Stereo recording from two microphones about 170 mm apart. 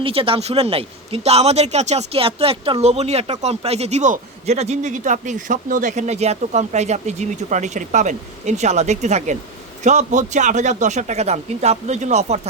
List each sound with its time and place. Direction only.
0.0 s a man's voice: 35° right (ahead or behind)